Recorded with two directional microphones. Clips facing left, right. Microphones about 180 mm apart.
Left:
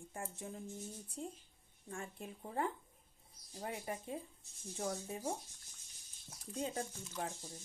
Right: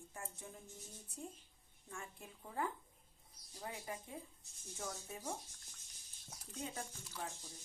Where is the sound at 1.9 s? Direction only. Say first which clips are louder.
Left 6 dB; 30° left (ahead or behind).